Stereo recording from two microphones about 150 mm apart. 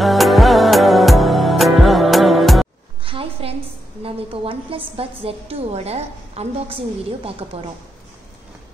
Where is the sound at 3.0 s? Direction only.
35° right (ahead or behind).